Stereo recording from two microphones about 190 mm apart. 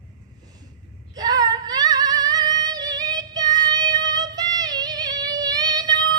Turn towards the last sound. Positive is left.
turn(degrees=-20)  # may be behind; listen again after turning